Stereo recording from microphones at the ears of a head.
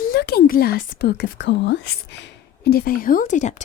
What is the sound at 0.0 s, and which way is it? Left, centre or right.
Speech, left.